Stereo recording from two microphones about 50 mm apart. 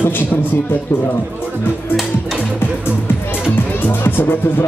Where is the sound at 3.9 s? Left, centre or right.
Left.